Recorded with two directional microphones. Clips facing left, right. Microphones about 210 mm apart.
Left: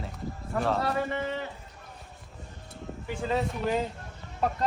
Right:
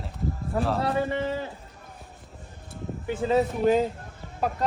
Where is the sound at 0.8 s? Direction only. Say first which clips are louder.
Right 3 dB; 30° right (ahead or behind).